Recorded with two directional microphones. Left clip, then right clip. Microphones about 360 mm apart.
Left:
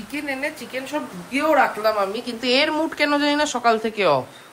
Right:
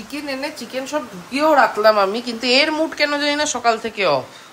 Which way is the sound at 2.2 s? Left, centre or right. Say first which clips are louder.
Right 3 dB; centre.